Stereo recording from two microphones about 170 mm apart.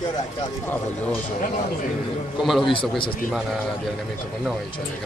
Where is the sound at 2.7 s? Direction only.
30° left (ahead or behind).